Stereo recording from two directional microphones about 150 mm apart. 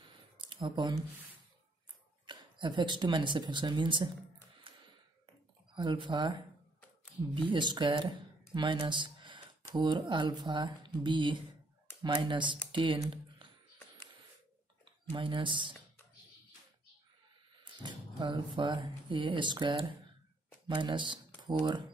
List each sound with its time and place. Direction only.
0.0 s a sound: 35° right (ahead or behind)
2.2 s speech: 30° right (ahead or behind)
4.7 s a sound: 35° right (ahead or behind)
5.8 s speech: 30° right (ahead or behind)
7.3 s speech: 35° right (ahead or behind)
8.5 s a sound: 30° right (ahead or behind)
9.8 s speech: 30° right (ahead or behind)
15.1 s speech: 35° right (ahead or behind)
17.6 s speech: 30° right (ahead or behind)